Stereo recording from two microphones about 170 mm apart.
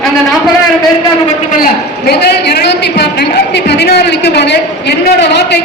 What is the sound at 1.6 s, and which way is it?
A man's voice, 70° left (ahead or behind).